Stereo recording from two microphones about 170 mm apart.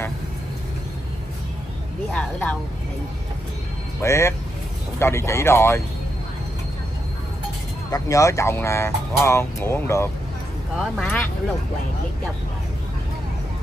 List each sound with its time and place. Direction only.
4.0 s speech: 15° left (ahead or behind)
7.9 s speech: 20° left (ahead or behind)
10.8 s speech: 5° left (ahead or behind)